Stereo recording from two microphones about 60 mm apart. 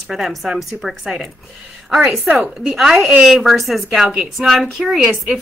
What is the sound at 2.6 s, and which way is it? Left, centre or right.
A woman's voice, centre.